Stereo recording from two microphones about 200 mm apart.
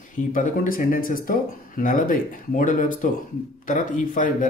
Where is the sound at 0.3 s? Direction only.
40° left (ahead or behind).